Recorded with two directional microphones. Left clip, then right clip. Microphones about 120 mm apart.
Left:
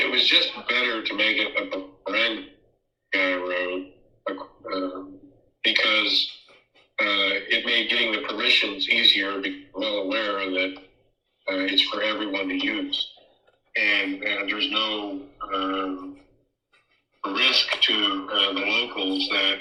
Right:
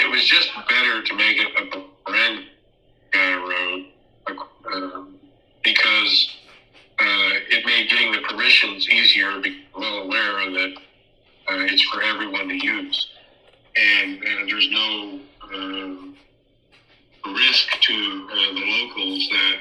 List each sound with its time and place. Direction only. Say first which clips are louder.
0.0 s speech: right 4 dB; 15° right (ahead or behind)
3.1 s a sound: right 4 dB; 15° right (ahead or behind)
5.6 s speech: right 4 dB; 15° right (ahead or behind)